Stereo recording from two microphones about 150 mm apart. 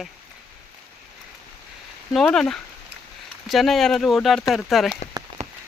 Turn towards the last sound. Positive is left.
turn(degrees=-50)  # may be behind; listen again after turning